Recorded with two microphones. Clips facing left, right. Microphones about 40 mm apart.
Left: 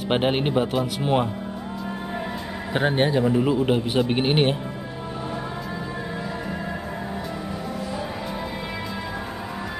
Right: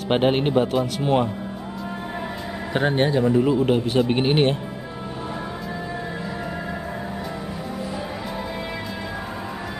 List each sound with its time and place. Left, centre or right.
0.1 s speech: centre
2.7 s speech: centre